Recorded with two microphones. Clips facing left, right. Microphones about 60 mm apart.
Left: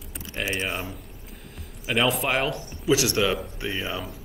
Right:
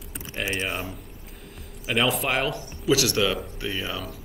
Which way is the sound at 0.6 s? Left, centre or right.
Centre.